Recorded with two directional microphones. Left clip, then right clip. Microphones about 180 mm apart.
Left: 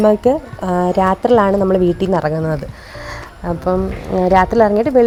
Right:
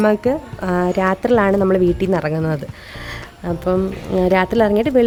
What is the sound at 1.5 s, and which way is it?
A woman's voice, 25° right (ahead or behind).